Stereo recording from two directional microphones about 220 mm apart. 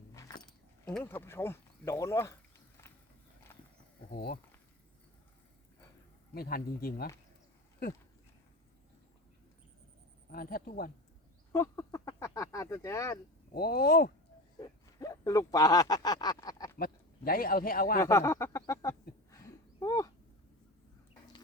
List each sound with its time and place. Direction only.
0.9 s speech: 5° left (ahead or behind)
4.1 s speech: 45° left (ahead or behind)
6.3 s speech: 45° left (ahead or behind)
10.3 s speech: 40° left (ahead or behind)
11.5 s speech: 15° left (ahead or behind)
13.5 s speech: 45° left (ahead or behind)
14.6 s speech: 15° left (ahead or behind)
16.7 s a man's voice: 40° left (ahead or behind)
18.0 s speech: 15° left (ahead or behind)
19.3 s a sound: 15° left (ahead or behind)